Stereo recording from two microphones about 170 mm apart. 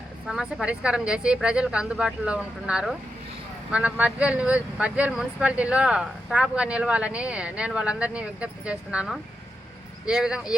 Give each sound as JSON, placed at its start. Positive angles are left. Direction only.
{"t": 0.3, "sound": "a woman's voice", "side_deg": -5}